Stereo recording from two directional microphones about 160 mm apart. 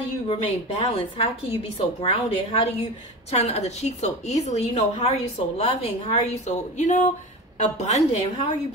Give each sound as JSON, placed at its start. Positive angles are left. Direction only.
{"t": 0.3, "sound": "a woman's voice", "side_deg": 40}